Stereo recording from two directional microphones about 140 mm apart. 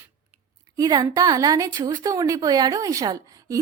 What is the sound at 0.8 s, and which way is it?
A woman's voice, 25° right (ahead or behind).